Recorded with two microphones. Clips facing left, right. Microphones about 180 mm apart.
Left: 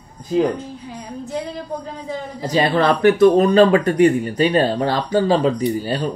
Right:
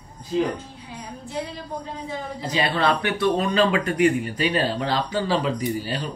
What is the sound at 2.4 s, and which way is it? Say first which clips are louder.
Speech: left 7 dB; 45° left (ahead or behind).